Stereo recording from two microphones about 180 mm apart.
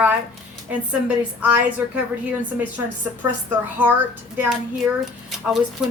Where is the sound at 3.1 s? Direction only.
10° right (ahead or behind).